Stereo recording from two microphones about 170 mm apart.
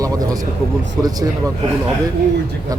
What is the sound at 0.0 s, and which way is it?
Speech, 20° right (ahead or behind).